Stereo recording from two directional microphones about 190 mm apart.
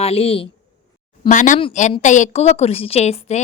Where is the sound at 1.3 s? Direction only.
40° left (ahead or behind).